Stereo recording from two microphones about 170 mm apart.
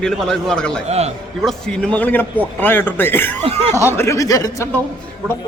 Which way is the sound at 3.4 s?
40° right (ahead or behind).